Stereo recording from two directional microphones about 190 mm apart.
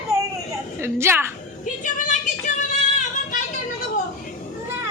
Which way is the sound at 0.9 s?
15° right (ahead or behind).